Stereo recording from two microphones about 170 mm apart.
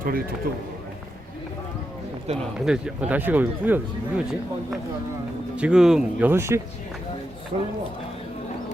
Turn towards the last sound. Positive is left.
turn(degrees=-45)  # may be behind; listen again after turning